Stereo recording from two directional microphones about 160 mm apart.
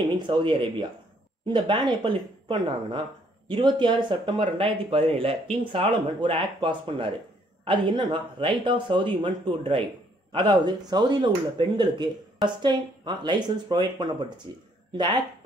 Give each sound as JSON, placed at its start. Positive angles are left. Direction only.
{"t": 0.3, "sound": "speech", "side_deg": -30}